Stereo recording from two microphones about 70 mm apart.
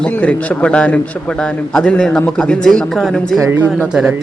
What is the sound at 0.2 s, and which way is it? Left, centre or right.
A man's voice, centre.